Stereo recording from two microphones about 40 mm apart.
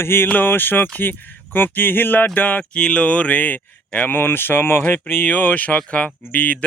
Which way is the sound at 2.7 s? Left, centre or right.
Left.